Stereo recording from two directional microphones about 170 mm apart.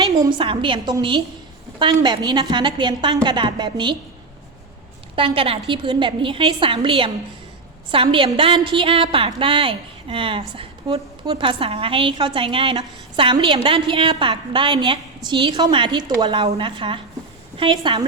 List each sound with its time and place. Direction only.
0.1 s a woman's voice: 25° right (ahead or behind)
5.1 s a woman's voice: 30° right (ahead or behind)